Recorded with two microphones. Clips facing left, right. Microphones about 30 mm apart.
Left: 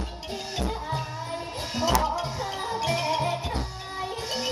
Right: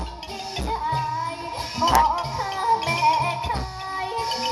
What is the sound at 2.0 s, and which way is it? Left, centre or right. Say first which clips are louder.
Music: right 5 dB; right.